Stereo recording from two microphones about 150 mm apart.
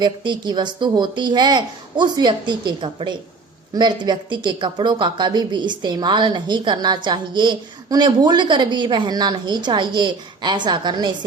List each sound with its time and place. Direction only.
0.0 s speech: 30° right (ahead or behind)